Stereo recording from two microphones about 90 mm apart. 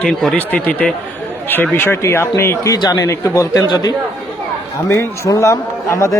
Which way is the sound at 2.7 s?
45° left (ahead or behind).